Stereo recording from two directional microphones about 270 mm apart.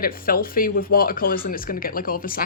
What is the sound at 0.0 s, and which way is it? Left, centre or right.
A woman's voice, left.